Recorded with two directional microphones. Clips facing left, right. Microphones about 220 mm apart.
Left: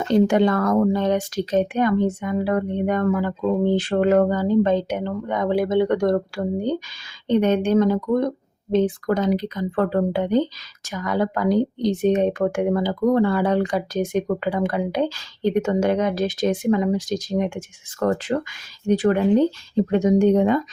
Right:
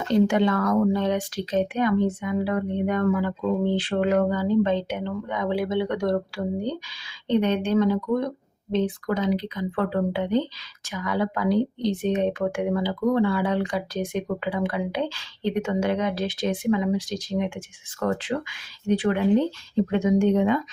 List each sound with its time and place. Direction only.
0.3 s speech: 40° left (ahead or behind)